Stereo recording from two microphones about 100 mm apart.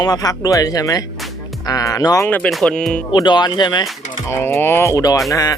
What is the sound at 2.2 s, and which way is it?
Speech, 15° left (ahead or behind).